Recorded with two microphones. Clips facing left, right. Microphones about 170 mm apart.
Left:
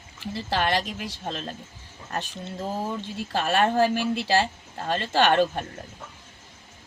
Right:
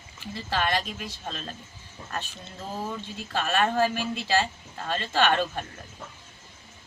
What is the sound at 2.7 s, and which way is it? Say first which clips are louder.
Speech: even; 30° left (ahead or behind).